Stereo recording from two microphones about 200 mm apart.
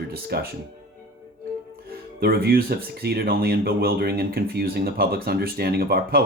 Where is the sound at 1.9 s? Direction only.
50° right (ahead or behind).